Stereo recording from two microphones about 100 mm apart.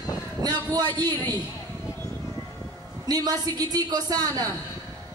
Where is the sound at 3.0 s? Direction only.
40° right (ahead or behind).